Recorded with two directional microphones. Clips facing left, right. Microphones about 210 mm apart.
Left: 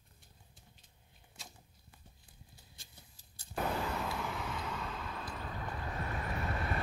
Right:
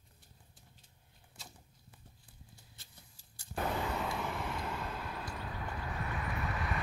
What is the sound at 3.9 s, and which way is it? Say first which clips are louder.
Vehicle: right 1 dB; centre (ahead or behind).